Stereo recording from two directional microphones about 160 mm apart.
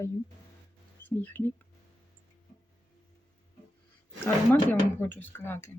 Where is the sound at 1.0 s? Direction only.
10° left (ahead or behind).